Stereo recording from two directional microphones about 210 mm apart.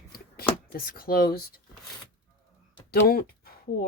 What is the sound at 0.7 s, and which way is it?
Speech, 45° left (ahead or behind).